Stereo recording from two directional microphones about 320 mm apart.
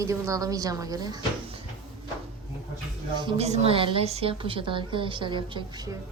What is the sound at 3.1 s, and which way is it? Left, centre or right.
A woman's voice, centre.